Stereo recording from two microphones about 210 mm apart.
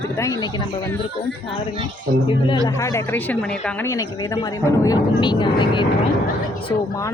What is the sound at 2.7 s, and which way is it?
Speech, 15° left (ahead or behind).